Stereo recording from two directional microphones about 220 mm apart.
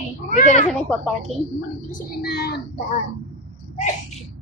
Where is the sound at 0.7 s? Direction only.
Centre (ahead or behind).